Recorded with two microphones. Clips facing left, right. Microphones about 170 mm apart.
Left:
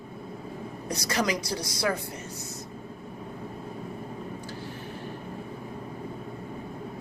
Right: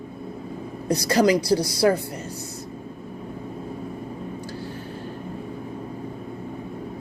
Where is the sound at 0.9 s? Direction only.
30° right (ahead or behind).